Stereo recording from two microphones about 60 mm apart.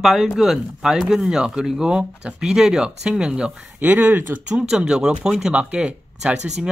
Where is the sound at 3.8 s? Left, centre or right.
Right.